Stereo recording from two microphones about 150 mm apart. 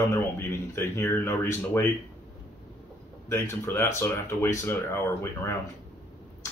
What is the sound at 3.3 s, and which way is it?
Speech, 15° left (ahead or behind).